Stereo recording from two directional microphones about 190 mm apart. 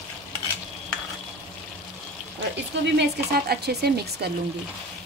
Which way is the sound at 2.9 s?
55° right (ahead or behind).